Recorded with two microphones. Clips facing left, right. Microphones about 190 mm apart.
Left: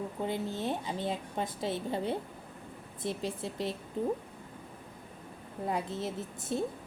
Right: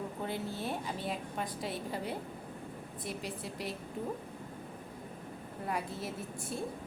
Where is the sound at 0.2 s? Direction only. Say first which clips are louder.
Left 5 dB; 20° left (ahead or behind).